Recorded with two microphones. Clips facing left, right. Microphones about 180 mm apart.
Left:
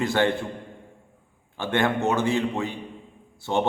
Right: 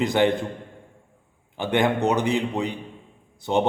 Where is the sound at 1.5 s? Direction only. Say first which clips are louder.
Right 2 dB; 15° right (ahead or behind).